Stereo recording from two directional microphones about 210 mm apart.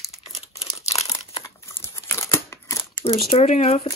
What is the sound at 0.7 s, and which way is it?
Crumpling, 30° left (ahead or behind).